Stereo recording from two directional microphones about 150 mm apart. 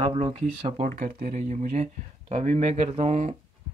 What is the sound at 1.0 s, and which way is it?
Speech, 60° right (ahead or behind).